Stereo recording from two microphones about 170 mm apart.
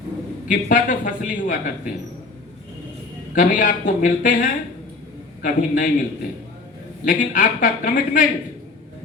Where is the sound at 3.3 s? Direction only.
50° left (ahead or behind).